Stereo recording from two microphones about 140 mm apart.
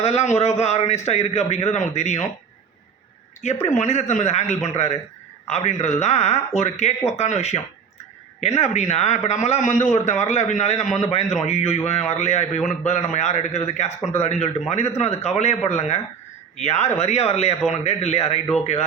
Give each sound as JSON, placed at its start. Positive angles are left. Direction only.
{"t": 0.0, "sound": "a man's voice", "side_deg": 50}
{"t": 3.4, "sound": "a man's voice", "side_deg": 55}